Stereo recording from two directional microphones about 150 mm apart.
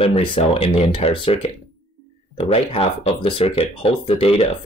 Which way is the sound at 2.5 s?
40° left (ahead or behind).